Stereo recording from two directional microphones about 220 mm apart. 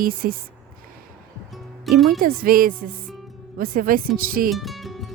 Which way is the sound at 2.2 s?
40° right (ahead or behind).